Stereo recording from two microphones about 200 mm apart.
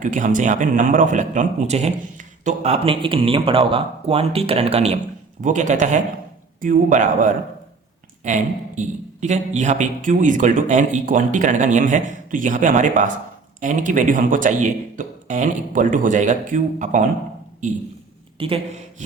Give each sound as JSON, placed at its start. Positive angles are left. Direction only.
{"t": 0.0, "sound": "a man's voice", "side_deg": -40}
{"t": 18.3, "sound": "a woman's voice", "side_deg": -25}